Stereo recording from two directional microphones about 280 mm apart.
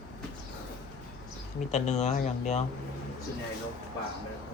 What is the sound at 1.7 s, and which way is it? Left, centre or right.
Speech, left.